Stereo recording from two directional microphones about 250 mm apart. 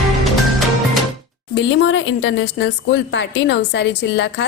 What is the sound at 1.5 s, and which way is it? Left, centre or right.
Speech, left.